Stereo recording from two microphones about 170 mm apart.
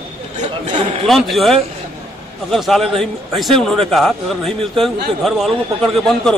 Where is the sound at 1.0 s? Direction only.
Centre (ahead or behind).